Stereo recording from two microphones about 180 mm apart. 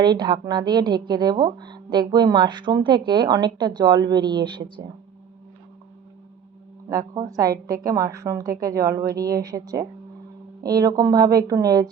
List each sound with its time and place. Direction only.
0.0 s speech: 25° right (ahead or behind)
6.9 s speech: 20° right (ahead or behind)